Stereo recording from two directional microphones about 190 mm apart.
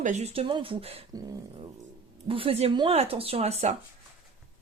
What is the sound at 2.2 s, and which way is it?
Speech, 30° right (ahead or behind).